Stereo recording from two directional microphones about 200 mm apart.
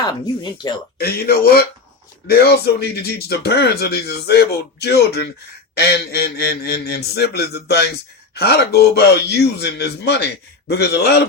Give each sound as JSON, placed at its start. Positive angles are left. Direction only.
{"t": 0.0, "sound": "speech", "side_deg": 20}
{"t": 0.9, "sound": "a man's voice", "side_deg": 50}